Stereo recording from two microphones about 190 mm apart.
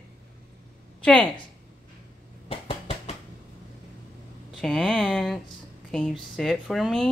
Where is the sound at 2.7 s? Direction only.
35° left (ahead or behind).